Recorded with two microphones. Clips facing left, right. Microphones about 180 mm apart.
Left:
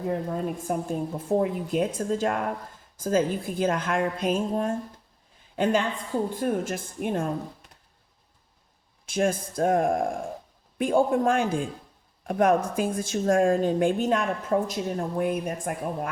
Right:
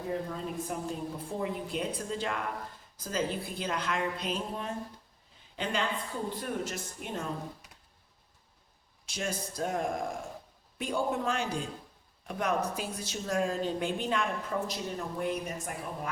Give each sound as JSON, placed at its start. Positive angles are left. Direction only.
{"t": 0.3, "sound": "a woman's voice", "side_deg": 50}
{"t": 9.0, "sound": "a woman's voice", "side_deg": 50}